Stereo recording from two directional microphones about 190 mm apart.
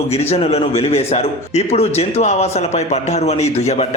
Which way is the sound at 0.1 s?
30° left (ahead or behind).